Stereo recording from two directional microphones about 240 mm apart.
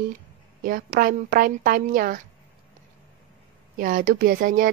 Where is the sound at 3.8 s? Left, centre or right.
Right.